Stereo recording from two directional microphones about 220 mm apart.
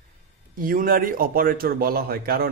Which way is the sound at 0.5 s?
40° right (ahead or behind).